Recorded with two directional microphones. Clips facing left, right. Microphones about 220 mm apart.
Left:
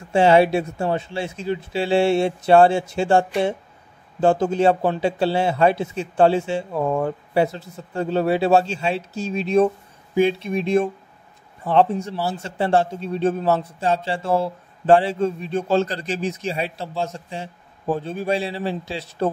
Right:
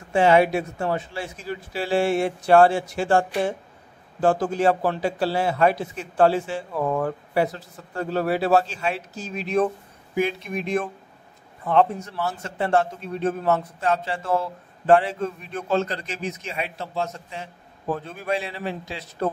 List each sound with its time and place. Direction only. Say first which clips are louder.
0.1 s a man's voice: left 2 dB; 30° left (ahead or behind)